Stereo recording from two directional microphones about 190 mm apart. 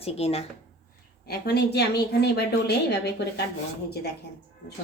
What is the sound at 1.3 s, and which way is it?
A woman's voice, 60° left (ahead or behind).